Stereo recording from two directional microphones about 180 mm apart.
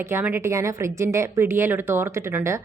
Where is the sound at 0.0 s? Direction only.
15° right (ahead or behind).